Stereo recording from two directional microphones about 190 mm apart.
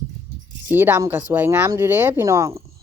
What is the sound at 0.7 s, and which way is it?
Speech, 10° right (ahead or behind).